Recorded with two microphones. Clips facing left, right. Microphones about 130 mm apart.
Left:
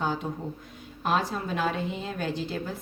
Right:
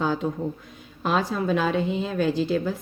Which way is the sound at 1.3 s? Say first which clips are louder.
Right 6 dB; 90° right.